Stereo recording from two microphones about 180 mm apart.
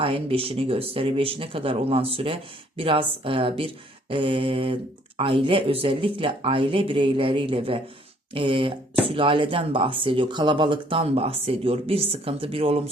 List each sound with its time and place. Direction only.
0.0 s speech: 30° right (ahead or behind)